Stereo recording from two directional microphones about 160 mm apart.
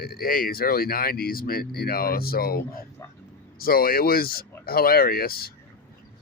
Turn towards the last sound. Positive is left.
turn(degrees=70)  # may be behind; listen again after turning